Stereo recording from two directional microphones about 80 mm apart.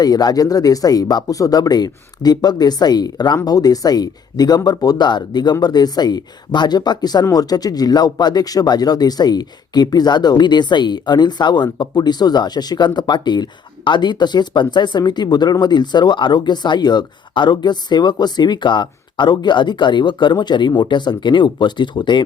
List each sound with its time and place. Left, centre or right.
0.0 s speech: left